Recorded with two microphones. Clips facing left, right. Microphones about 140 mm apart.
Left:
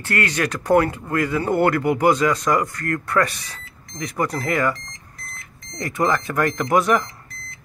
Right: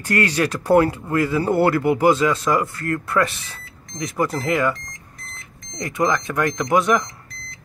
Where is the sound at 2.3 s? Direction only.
5° right (ahead or behind).